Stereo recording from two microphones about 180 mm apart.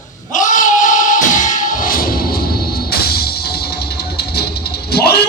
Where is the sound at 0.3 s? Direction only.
45° left (ahead or behind).